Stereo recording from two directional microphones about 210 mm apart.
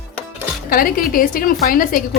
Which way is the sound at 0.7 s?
45° left (ahead or behind).